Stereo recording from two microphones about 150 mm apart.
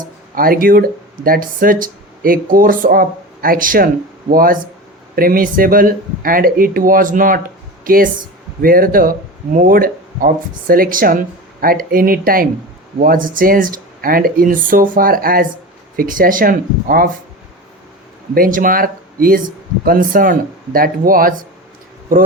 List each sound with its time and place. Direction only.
0.0 s speech: 75° right (ahead or behind)
18.3 s speech: 65° right (ahead or behind)